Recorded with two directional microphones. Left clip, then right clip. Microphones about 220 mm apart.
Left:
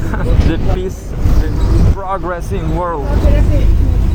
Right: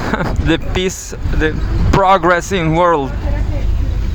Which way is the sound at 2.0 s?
55° right (ahead or behind).